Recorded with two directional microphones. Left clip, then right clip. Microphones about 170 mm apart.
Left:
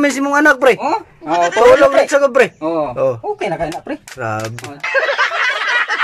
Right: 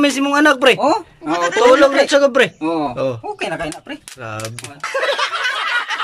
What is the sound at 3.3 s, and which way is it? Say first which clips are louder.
Speech: left 4 dB; 15° left (ahead or behind).